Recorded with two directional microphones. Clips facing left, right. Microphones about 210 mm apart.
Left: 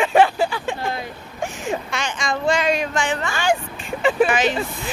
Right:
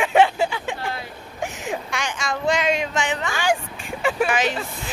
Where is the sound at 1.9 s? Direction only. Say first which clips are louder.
Left 2 dB; 10° right (ahead or behind).